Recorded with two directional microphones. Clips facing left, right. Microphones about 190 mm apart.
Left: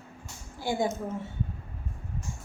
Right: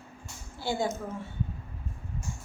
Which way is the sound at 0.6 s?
15° left (ahead or behind).